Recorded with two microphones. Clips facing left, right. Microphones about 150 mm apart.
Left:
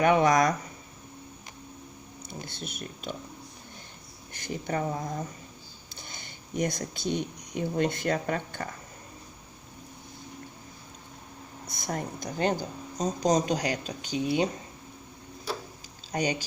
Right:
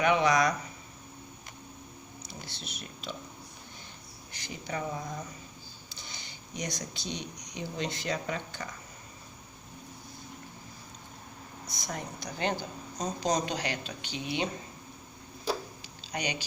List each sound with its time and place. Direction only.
0.0 s speech: 45° left (ahead or behind)
2.2 s speech: 50° left (ahead or behind)
4.3 s speech: 50° left (ahead or behind)
11.6 s speech: 55° left (ahead or behind)
16.1 s speech: 45° left (ahead or behind)